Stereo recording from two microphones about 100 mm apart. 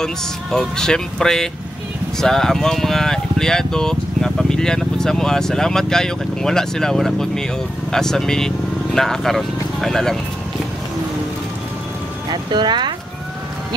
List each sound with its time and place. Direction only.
0.0 s speech: 5° left (ahead or behind)
12.3 s speech: 45° right (ahead or behind)